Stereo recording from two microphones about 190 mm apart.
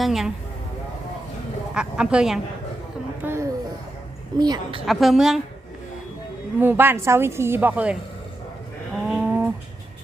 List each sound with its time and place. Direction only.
0.0 s speech: centre (ahead or behind)
1.7 s speech: 5° right (ahead or behind)
3.2 s a woman's voice: 15° right (ahead or behind)
4.9 s speech: centre (ahead or behind)
6.6 s speech: 10° right (ahead or behind)
9.0 s a sound: 5° right (ahead or behind)